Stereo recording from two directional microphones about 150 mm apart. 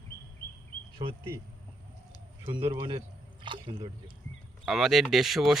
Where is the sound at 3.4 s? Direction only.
30° right (ahead or behind).